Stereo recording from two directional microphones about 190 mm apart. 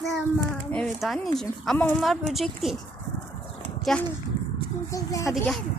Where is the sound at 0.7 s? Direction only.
5° left (ahead or behind).